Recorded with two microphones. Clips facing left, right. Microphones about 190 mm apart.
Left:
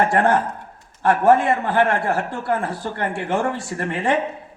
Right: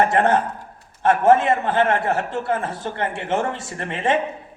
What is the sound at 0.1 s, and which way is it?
A man's voice, 20° right (ahead or behind).